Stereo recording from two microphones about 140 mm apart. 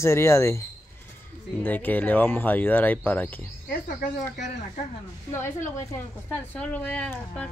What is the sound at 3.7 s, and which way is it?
Speech, 70° left (ahead or behind).